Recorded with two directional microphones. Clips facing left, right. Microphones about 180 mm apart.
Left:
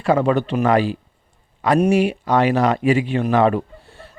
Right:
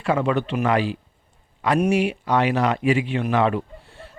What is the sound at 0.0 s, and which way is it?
Speech, 40° left (ahead or behind).